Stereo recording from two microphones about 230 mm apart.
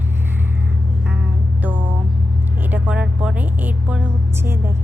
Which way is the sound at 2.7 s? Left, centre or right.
Centre.